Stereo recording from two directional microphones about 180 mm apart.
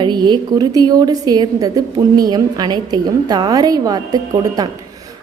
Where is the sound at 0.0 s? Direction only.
25° right (ahead or behind).